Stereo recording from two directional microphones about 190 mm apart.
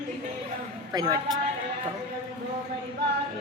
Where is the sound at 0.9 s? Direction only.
20° right (ahead or behind).